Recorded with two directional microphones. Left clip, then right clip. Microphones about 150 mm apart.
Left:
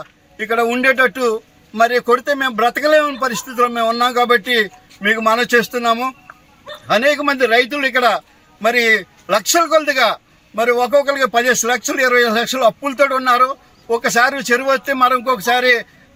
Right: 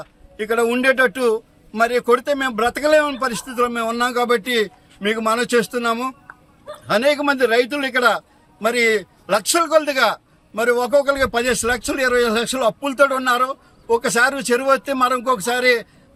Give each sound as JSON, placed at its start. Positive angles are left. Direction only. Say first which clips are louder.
{"t": 0.0, "sound": "a man's voice", "louder": "left 2 dB", "side_deg": -35}